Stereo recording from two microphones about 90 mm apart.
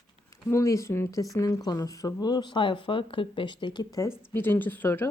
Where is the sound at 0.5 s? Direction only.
35° left (ahead or behind).